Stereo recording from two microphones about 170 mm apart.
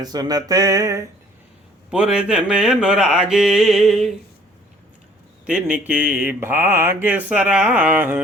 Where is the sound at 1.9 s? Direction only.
5° right (ahead or behind).